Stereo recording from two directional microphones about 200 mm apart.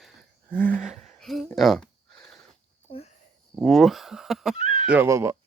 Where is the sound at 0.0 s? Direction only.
Centre (ahead or behind).